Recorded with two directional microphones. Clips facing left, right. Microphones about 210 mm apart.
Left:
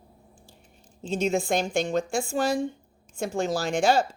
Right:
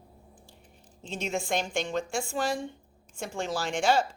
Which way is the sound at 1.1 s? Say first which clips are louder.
Left 6 dB; 40° left (ahead or behind).